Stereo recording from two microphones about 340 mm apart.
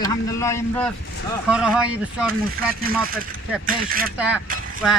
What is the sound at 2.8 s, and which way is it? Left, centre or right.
Mechanisms, right.